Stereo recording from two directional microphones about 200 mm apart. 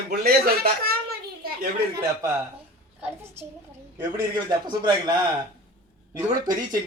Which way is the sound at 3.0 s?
10° right (ahead or behind).